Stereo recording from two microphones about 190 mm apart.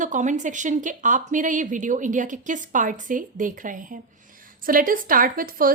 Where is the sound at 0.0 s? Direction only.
40° right (ahead or behind).